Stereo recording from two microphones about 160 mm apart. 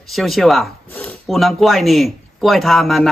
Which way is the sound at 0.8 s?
10° left (ahead or behind).